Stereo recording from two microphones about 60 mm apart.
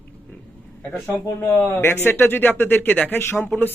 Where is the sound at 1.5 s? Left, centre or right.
Left.